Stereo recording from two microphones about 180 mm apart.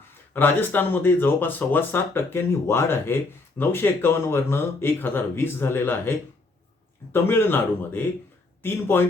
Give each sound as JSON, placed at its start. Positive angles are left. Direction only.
{"t": 0.3, "sound": "speech", "side_deg": 10}